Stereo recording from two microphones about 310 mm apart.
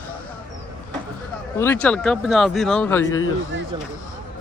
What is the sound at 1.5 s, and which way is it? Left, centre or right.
Speech, centre.